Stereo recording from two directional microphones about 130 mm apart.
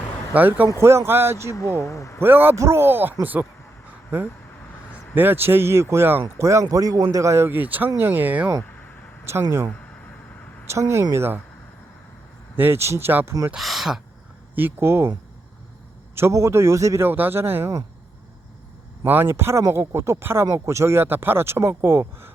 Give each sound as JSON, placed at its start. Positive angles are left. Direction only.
{"t": 0.3, "sound": "a man's voice", "side_deg": -15}
{"t": 1.9, "sound": "speech", "side_deg": 25}
{"t": 2.2, "sound": "a man's voice", "side_deg": -15}
{"t": 5.1, "sound": "a man's voice", "side_deg": -15}
{"t": 10.7, "sound": "speech", "side_deg": -20}
{"t": 12.5, "sound": "a man's voice", "side_deg": -15}
{"t": 13.5, "sound": "speech", "side_deg": 0}
{"t": 14.5, "sound": "a man's voice", "side_deg": -15}
{"t": 16.1, "sound": "speech", "side_deg": -20}
{"t": 19.0, "sound": "speech", "side_deg": -15}